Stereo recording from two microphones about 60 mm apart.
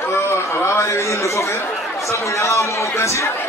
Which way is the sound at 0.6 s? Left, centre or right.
Left.